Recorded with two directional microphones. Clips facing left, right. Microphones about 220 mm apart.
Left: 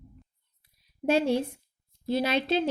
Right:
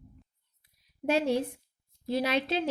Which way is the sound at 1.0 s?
30° left (ahead or behind).